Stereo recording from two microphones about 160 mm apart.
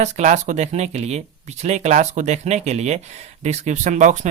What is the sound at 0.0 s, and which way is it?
Speech, 50° right (ahead or behind).